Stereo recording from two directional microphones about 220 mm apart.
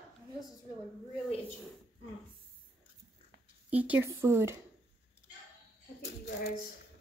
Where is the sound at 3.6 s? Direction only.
5° right (ahead or behind).